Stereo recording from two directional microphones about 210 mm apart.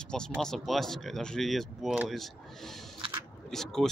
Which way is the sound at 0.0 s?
5° left (ahead or behind).